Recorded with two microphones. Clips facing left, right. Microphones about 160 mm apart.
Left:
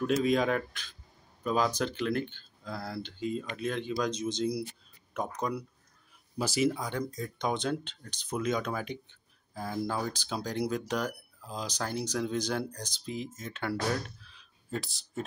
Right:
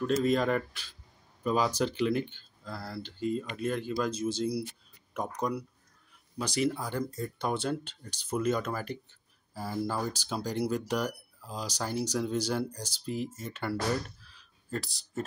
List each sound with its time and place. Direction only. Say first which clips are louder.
0.0 s speech: even; 5° left (ahead or behind)
6.3 s speech: left 1 dB; 5° left (ahead or behind)
6.8 s speech: right 1 dB; 5° right (ahead or behind)